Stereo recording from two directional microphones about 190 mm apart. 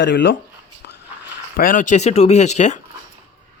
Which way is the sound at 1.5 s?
45° left (ahead or behind).